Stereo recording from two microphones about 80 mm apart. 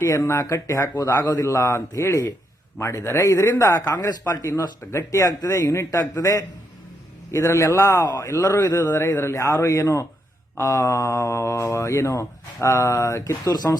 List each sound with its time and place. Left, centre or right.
0.3 s speech: left